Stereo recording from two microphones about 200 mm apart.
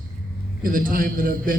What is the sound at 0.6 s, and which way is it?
Speech, 45° right (ahead or behind).